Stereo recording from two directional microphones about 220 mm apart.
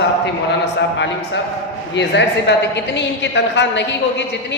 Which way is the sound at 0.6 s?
55° left (ahead or behind).